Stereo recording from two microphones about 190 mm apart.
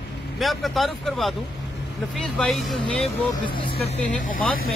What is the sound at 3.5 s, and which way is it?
Speech, 25° left (ahead or behind).